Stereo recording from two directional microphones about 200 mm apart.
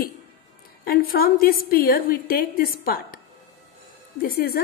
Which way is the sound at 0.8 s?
50° left (ahead or behind).